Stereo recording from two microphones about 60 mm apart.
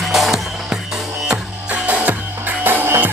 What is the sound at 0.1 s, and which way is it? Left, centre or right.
Music, centre.